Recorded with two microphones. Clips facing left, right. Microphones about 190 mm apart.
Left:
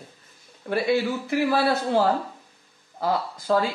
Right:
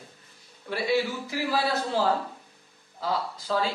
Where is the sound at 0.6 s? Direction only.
55° left (ahead or behind).